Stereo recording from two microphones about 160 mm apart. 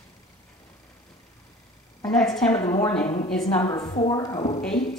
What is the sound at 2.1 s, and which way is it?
Speech, 5° left (ahead or behind).